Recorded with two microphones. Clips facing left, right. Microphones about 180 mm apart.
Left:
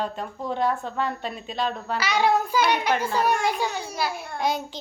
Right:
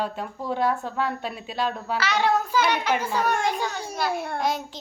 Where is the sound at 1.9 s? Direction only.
10° left (ahead or behind).